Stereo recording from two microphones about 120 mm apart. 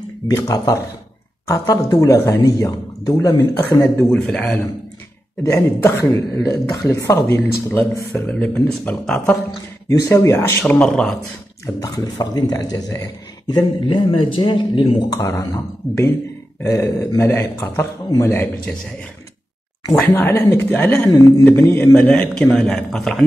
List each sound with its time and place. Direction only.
0.3 s a man's voice: 30° left (ahead or behind); by 4.6 s 10° left (ahead or behind)
5.4 s a man's voice: 20° left (ahead or behind); by 9.3 s 5° left (ahead or behind)
9.8 s a man's voice: 25° left (ahead or behind)
10.6 s a man's voice: 10° left (ahead or behind)
11.6 s speech: 30° left (ahead or behind)
13.8 s speech: 40° left (ahead or behind)
15.2 s a man's voice: 30° left (ahead or behind)
16.6 s a man's voice: 25° left (ahead or behind)
19.9 s a man's voice: 15° left (ahead or behind)
21.1 s a man's voice: 30° left (ahead or behind)
21.5 s a man's voice: 15° left (ahead or behind)